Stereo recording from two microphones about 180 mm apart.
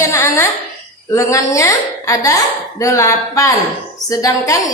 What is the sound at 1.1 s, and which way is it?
A woman's voice, 15° left (ahead or behind).